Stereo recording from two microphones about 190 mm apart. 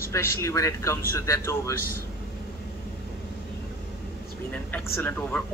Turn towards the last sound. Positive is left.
turn(degrees=5)  # may be behind; listen again after turning